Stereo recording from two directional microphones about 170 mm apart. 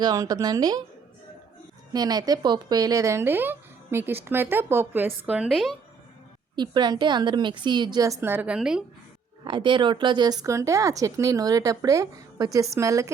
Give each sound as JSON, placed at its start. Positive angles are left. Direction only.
{"t": 0.0, "sound": "a woman's voice", "side_deg": -25}
{"t": 1.9, "sound": "speech", "side_deg": -25}
{"t": 6.6, "sound": "a woman's voice", "side_deg": -25}
{"t": 9.4, "sound": "a woman's voice", "side_deg": -30}